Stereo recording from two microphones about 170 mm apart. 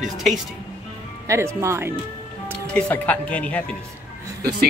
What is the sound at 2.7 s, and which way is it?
Speech, 10° left (ahead or behind).